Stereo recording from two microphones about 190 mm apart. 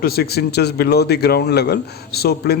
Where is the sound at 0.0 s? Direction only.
55° left (ahead or behind).